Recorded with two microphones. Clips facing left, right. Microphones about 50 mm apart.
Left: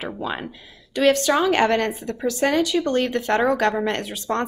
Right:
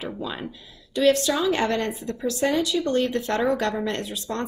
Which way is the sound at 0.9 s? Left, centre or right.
Left.